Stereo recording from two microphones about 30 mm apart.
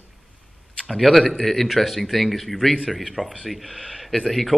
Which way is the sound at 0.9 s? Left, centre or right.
Centre.